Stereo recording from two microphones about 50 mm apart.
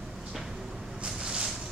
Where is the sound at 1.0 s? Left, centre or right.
Centre.